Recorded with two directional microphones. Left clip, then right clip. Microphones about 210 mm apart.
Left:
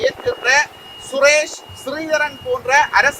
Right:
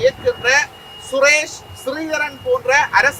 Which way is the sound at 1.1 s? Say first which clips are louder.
Even; 15° left (ahead or behind).